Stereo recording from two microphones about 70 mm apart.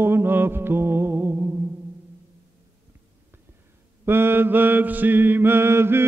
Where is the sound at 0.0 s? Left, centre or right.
Right.